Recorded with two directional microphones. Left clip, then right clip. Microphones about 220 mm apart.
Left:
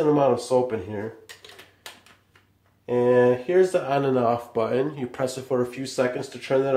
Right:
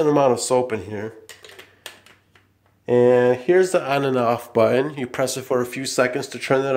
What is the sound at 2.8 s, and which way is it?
Speech, 50° right (ahead or behind).